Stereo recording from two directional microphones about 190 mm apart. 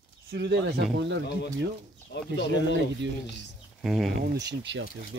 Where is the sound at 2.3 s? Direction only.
65° left (ahead or behind).